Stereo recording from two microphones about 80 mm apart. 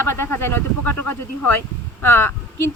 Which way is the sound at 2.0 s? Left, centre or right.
Left.